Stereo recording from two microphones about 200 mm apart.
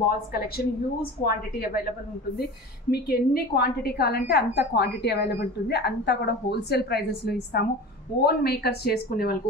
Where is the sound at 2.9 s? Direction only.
50° left (ahead or behind).